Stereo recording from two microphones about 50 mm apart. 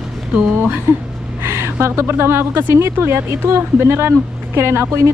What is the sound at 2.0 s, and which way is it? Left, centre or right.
Speech, right.